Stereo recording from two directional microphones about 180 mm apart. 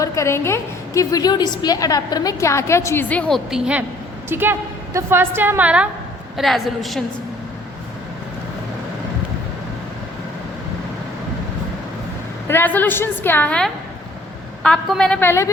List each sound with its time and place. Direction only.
0.0 s a woman's voice: 15° left (ahead or behind)
12.5 s a woman's voice: 10° left (ahead or behind)